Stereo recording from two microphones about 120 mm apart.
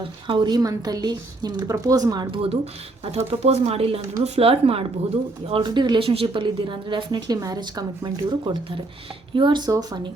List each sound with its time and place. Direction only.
0.3 s a woman's voice: 40° right (ahead or behind)
2.3 s speech: 50° right (ahead or behind)
7.3 s a woman's voice: 30° right (ahead or behind)